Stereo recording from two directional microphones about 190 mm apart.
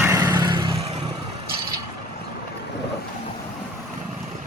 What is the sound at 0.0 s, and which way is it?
Vehicle, 15° right (ahead or behind).